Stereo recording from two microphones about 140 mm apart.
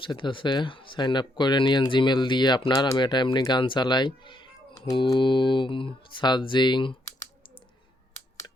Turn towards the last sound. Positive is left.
turn(degrees=35)  # may be behind; listen again after turning